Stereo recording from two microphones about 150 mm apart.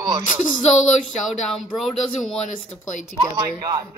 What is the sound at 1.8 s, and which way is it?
Speech, centre (ahead or behind).